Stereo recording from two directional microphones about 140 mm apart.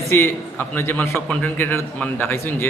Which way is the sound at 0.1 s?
15° left (ahead or behind).